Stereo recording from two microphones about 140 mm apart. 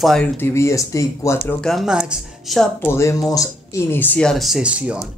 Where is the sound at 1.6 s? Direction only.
Centre (ahead or behind).